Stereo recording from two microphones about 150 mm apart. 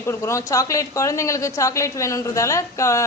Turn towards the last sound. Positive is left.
turn(degrees=20)  # may be behind; listen again after turning